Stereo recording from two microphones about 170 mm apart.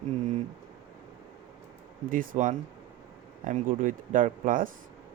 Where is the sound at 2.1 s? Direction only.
50° right (ahead or behind).